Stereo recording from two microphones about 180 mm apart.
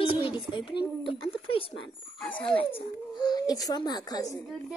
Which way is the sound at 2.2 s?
5° left (ahead or behind).